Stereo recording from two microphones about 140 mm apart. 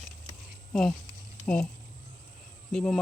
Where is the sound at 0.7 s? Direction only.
5° left (ahead or behind).